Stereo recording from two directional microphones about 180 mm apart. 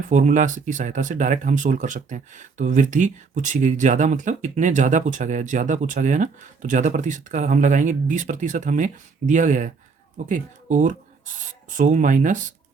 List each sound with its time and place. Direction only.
0.1 s speech: 45° right (ahead or behind)